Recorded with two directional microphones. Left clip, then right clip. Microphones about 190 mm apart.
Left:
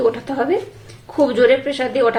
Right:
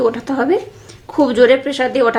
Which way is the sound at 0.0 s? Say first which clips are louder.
Right 2 dB; 25° right (ahead or behind).